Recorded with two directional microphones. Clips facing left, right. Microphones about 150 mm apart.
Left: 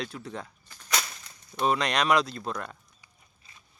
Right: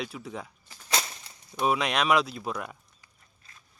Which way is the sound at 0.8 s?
25° right (ahead or behind).